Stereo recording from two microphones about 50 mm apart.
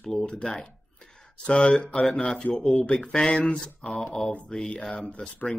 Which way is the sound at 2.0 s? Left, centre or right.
Centre.